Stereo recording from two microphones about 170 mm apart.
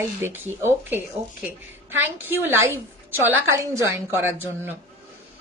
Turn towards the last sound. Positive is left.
turn(degrees=-15)  # may be behind; listen again after turning